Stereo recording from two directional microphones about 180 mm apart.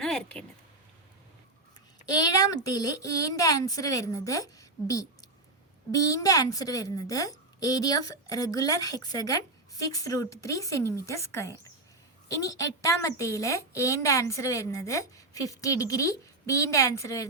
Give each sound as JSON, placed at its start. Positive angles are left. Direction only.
{"t": 0.0, "sound": "a sound", "side_deg": 5}
{"t": 2.0, "sound": "a woman's voice", "side_deg": 20}
{"t": 12.8, "sound": "a woman's voice", "side_deg": 15}